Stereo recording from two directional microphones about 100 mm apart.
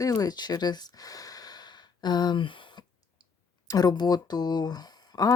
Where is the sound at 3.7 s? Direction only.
40° left (ahead or behind).